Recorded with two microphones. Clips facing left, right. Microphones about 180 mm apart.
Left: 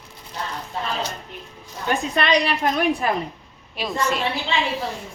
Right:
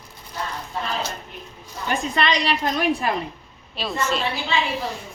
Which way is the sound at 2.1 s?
55° left (ahead or behind).